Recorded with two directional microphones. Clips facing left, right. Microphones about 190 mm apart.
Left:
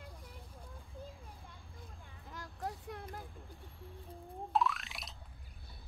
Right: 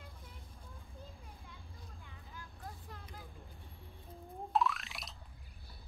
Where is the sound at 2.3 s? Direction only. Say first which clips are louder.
Left 8 dB; 80° left.